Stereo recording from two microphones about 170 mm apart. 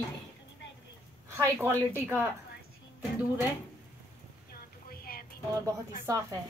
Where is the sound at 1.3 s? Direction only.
15° right (ahead or behind).